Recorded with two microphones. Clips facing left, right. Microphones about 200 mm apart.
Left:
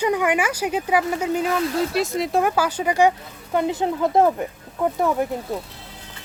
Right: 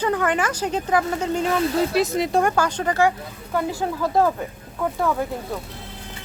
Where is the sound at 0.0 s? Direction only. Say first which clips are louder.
Left 1 dB; 10° left (ahead or behind).